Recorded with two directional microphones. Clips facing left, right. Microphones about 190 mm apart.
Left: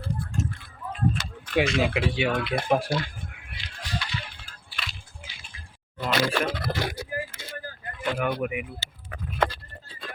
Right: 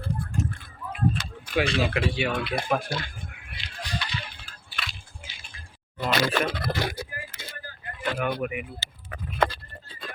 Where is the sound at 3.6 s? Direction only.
20° right (ahead or behind).